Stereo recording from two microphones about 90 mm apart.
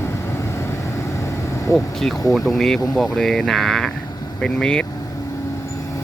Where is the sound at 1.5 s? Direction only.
30° left (ahead or behind).